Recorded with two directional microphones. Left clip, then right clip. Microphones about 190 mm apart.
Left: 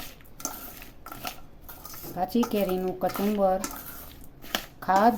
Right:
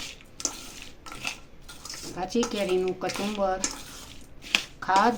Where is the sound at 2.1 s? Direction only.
50° left (ahead or behind).